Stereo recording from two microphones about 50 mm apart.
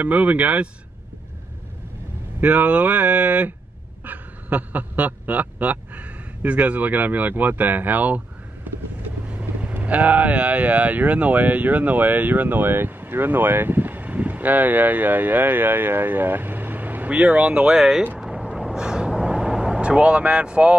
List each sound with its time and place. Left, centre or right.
0.0 s speech: right
2.4 s speech: right
8.7 s vehicle: right
9.3 s speech: right
17.7 s speech: centre
18.2 s vehicle: centre